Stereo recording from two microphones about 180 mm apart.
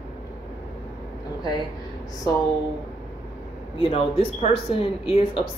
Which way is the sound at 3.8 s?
30° left (ahead or behind).